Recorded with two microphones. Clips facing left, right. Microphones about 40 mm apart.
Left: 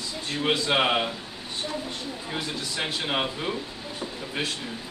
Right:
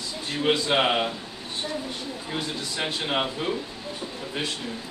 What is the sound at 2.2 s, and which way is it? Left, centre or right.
A man's voice, centre.